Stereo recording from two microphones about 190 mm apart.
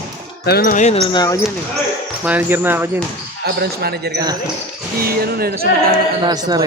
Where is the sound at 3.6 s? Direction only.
55° right (ahead or behind).